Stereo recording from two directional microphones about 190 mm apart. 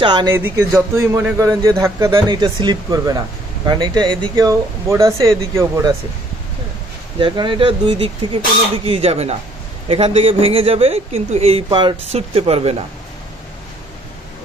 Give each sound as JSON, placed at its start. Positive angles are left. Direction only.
{"t": 0.0, "sound": "speech", "side_deg": -25}
{"t": 0.3, "sound": "a man's voice", "side_deg": -15}
{"t": 7.2, "sound": "speech", "side_deg": -25}